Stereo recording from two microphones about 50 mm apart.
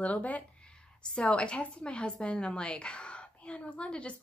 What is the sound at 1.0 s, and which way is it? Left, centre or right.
A woman's voice, centre.